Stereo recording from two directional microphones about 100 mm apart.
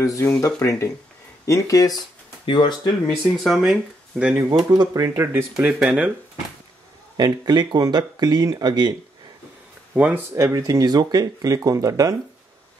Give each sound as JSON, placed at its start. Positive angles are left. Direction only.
{"t": 0.0, "sound": "speech", "side_deg": 35}
{"t": 2.4, "sound": "speech", "side_deg": 55}
{"t": 3.3, "sound": "speech", "side_deg": 0}
{"t": 4.6, "sound": "speech", "side_deg": -35}
{"t": 5.7, "sound": "speech", "side_deg": -10}
{"t": 7.2, "sound": "speech", "side_deg": -45}
{"t": 9.9, "sound": "speech", "side_deg": -15}
{"t": 10.3, "sound": "speech", "side_deg": -30}
{"t": 10.6, "sound": "speech", "side_deg": -40}